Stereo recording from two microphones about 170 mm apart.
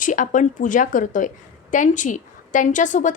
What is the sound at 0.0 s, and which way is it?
A woman's voice, 50° left (ahead or behind).